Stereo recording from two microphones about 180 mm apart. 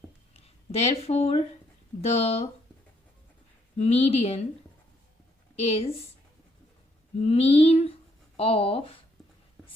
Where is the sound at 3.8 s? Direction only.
35° left (ahead or behind).